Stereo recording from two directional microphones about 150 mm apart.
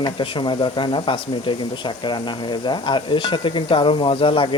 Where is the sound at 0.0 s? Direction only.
30° left (ahead or behind).